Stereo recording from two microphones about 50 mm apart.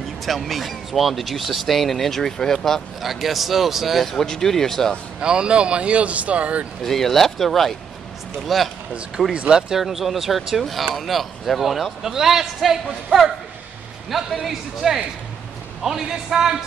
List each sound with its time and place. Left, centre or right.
0.2 s speech: centre
5.2 s speech: centre
6.8 s speech: centre
9.3 s a man's voice: centre
9.8 s a man's voice: centre